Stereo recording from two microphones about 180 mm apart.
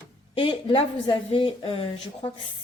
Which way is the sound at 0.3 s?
30° left (ahead or behind).